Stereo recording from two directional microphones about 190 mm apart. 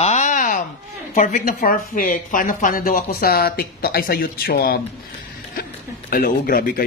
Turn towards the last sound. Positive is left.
turn(degrees=50)  # may be behind; listen again after turning